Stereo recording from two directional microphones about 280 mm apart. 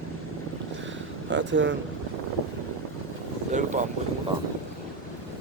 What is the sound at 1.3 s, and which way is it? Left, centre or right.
Speech, right.